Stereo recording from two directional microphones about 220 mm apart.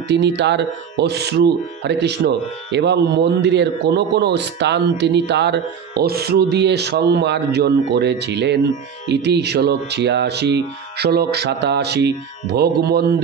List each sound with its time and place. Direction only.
0.1 s speech: 50° right (ahead or behind)